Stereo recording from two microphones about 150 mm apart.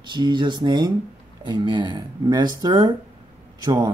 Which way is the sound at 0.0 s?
30° right (ahead or behind).